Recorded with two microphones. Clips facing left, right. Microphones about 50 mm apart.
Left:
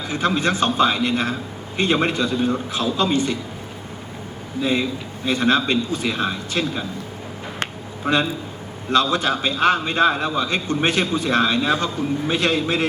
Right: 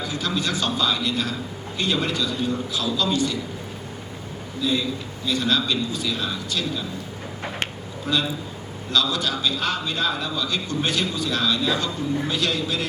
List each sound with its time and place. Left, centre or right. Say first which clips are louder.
0.0 s a man's voice: left 5 dB; left
4.6 s a man's voice: left 3 dB; left
8.0 s a man's voice: left 4 dB; left